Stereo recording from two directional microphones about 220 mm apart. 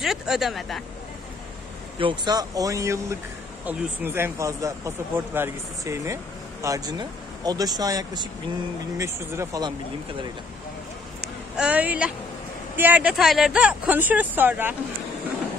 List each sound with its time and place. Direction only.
0.0 s speech: centre (ahead or behind)
2.0 s speech: 20° right (ahead or behind)
11.5 s speech: 5° right (ahead or behind)